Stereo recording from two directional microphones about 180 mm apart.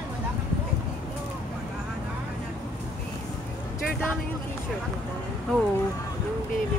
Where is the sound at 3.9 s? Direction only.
5° left (ahead or behind).